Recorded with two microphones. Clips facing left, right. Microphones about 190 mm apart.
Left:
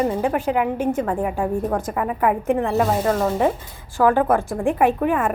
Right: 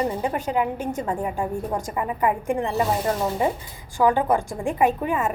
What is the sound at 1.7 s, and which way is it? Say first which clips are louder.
Speech: left 3 dB; 60° left (ahead or behind).